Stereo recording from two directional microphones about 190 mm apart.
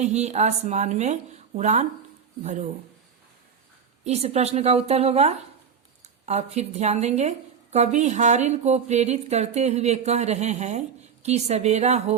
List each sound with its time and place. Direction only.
0.0 s a woman's voice: 35° right (ahead or behind)
4.0 s a woman's voice: 35° right (ahead or behind)